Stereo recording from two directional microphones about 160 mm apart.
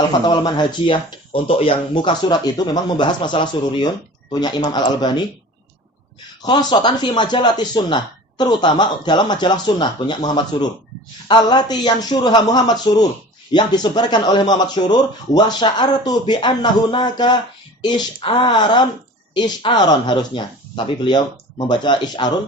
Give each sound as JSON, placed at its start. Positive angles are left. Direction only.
{"t": 0.3, "sound": "speech", "side_deg": 25}
{"t": 6.4, "sound": "speech", "side_deg": 25}